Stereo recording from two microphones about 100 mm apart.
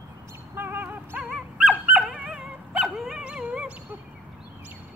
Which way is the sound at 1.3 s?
5° right (ahead or behind).